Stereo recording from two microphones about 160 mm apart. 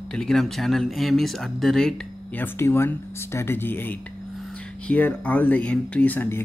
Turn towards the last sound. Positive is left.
turn(degrees=15)  # may be behind; listen again after turning